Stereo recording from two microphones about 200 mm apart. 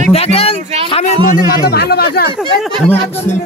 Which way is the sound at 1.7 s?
50° left (ahead or behind).